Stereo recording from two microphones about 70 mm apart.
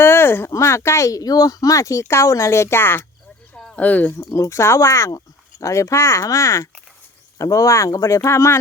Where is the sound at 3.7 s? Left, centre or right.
Left.